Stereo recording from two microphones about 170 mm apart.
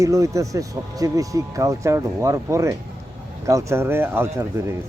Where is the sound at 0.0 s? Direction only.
20° right (ahead or behind).